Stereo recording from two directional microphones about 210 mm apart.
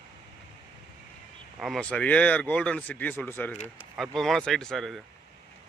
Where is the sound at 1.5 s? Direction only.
Centre (ahead or behind).